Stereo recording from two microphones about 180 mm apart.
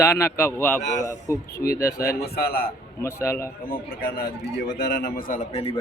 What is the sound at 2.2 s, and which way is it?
Speech, 60° left (ahead or behind).